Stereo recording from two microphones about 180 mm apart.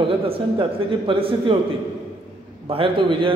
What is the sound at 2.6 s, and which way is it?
Speech, 30° right (ahead or behind).